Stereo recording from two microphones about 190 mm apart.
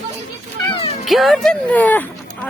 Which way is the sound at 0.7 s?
30° left (ahead or behind).